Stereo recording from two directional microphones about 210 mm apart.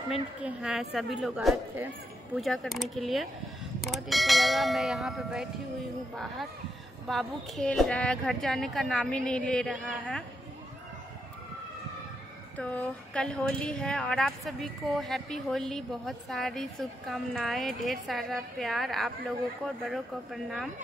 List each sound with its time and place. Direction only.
0.1 s a woman's voice: centre (ahead or behind)
12.5 s a woman's voice: 5° left (ahead or behind)